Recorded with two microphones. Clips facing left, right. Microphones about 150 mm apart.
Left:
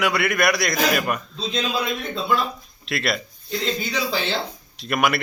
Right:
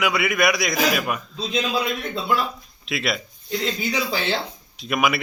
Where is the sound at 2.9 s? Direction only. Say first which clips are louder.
Left 1 dB; centre (ahead or behind).